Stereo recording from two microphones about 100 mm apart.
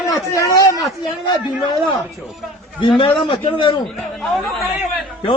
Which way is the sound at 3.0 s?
60° left (ahead or behind).